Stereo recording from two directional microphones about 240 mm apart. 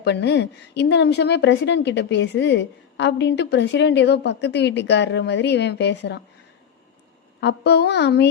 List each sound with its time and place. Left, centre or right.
0.0 s a woman's voice: left
7.4 s a woman's voice: left